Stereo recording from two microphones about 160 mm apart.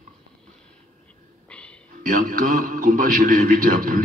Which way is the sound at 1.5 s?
5° left (ahead or behind).